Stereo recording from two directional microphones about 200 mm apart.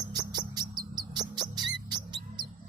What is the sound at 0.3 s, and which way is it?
Music, 20° right (ahead or behind).